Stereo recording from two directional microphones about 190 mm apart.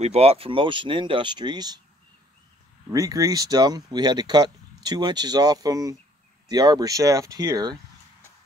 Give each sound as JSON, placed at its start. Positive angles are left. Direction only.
{"t": 0.0, "sound": "speech", "side_deg": -35}
{"t": 2.9, "sound": "speech", "side_deg": -20}